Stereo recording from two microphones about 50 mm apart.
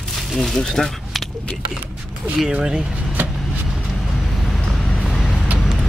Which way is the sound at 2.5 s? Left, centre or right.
Centre.